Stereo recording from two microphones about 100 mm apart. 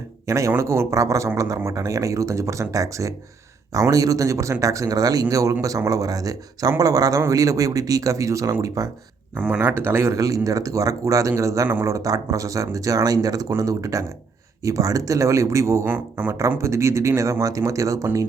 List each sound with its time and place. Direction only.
0.3 s speech: 30° right (ahead or behind)
9.3 s speech: 15° right (ahead or behind)
9.6 s speech: 25° right (ahead or behind)
15.9 s speech: 15° right (ahead or behind)
16.6 s speech: 30° right (ahead or behind)